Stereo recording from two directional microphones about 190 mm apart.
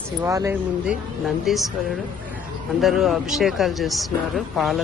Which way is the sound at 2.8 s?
Centre (ahead or behind).